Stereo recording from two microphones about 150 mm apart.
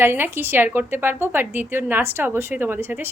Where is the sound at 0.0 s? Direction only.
15° right (ahead or behind).